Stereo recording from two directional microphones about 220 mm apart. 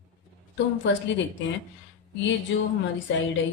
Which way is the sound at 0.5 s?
55° left (ahead or behind).